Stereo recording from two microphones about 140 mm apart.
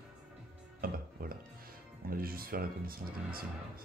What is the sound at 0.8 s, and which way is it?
Speech, 90° right.